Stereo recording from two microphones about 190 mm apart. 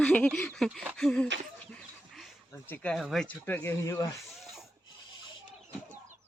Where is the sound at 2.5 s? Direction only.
10° left (ahead or behind).